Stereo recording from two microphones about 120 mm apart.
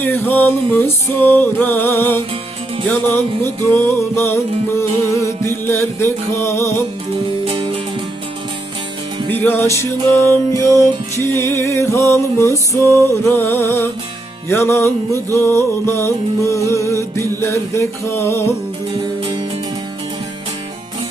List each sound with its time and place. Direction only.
0.0 s music: 15° left (ahead or behind)
7.4 s music: 45° right (ahead or behind)
9.3 s music: 15° left (ahead or behind)